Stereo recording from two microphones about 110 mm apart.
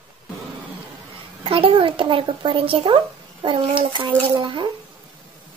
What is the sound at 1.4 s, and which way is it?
A child's voice, 55° right (ahead or behind).